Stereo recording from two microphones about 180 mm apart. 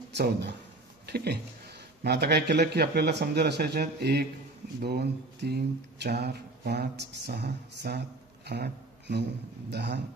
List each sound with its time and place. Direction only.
0.1 s speech: 70° right (ahead or behind)